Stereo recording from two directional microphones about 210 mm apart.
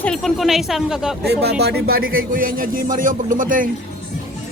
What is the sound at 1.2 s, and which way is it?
Speech, 50° right (ahead or behind).